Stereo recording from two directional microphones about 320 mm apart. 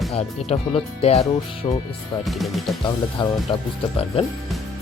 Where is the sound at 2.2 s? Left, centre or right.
Centre.